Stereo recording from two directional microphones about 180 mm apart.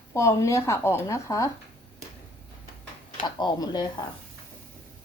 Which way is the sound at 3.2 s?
25° left (ahead or behind).